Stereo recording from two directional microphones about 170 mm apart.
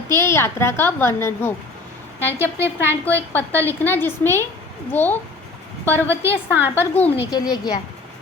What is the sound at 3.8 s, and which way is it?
A woman's voice, 10° left (ahead or behind).